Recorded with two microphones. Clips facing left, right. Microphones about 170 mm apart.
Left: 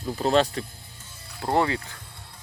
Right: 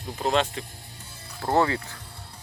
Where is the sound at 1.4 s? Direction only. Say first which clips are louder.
Right 1 dB; 20° left (ahead or behind).